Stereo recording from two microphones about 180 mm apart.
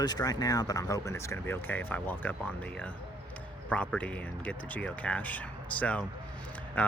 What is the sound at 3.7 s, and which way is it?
Speech, 5° left (ahead or behind).